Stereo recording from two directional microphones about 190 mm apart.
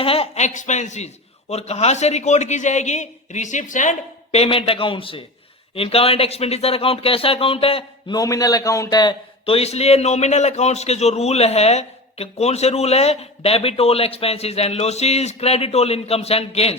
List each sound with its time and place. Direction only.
0.0 s speech: 30° left (ahead or behind)